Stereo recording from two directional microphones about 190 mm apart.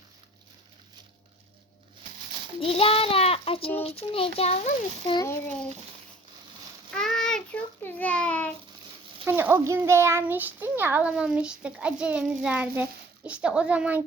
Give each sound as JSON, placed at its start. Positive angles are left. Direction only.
{"t": 2.6, "sound": "a child's voice", "side_deg": 30}
{"t": 5.2, "sound": "a child's voice", "side_deg": 10}
{"t": 6.9, "sound": "a child's voice", "side_deg": 5}
{"t": 9.2, "sound": "a child's voice", "side_deg": -10}